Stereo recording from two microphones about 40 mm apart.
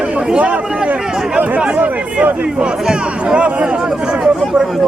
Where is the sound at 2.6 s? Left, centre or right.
Right.